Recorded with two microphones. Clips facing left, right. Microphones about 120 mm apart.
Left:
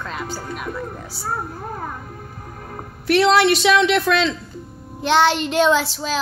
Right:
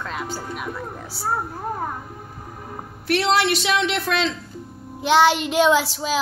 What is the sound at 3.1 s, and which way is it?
Speech, 90° left.